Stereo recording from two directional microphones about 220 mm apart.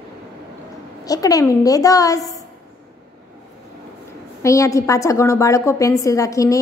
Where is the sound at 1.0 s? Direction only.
15° left (ahead or behind).